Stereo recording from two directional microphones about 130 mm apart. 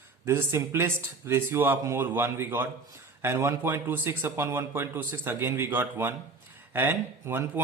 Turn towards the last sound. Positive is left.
turn(degrees=-15)  # may be behind; listen again after turning